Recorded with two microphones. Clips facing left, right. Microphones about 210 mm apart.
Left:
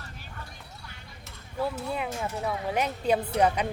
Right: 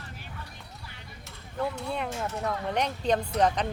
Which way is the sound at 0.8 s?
Centre (ahead or behind).